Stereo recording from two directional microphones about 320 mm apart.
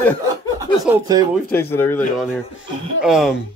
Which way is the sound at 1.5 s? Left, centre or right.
Centre.